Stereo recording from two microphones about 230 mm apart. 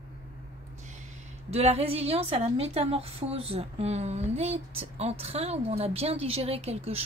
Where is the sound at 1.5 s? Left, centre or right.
Right.